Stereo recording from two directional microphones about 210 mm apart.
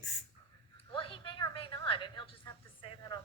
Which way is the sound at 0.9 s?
25° left (ahead or behind).